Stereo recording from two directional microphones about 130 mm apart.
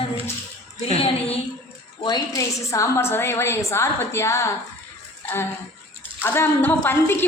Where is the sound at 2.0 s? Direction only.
30° left (ahead or behind).